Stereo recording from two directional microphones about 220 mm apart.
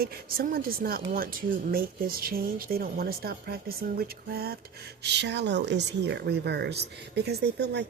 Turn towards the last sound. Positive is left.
turn(degrees=-50)  # may be behind; listen again after turning